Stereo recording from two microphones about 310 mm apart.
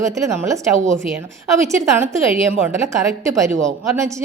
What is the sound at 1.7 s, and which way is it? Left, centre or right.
A woman's voice, centre.